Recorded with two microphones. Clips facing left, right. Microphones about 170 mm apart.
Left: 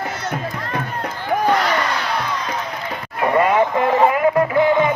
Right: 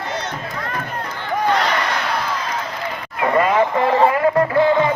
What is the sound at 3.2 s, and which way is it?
Music, 15° left (ahead or behind).